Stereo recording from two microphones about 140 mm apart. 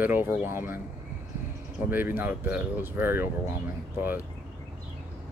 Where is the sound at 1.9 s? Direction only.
15° right (ahead or behind).